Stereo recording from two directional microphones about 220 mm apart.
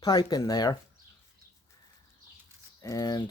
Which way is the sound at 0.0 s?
20° left (ahead or behind).